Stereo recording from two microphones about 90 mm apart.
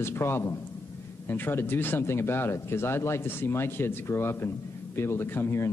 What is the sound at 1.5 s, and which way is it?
Speech, 25° left (ahead or behind).